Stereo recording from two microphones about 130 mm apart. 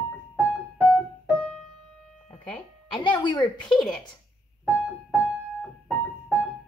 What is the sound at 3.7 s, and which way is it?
Speech, 5° left (ahead or behind).